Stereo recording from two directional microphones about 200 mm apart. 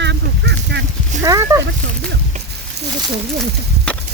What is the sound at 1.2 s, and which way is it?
Speech, 15° right (ahead or behind).